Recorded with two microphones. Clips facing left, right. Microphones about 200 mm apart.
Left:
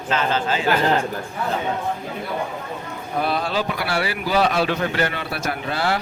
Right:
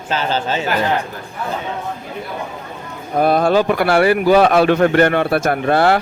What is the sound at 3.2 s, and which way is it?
A man's voice, 50° right (ahead or behind).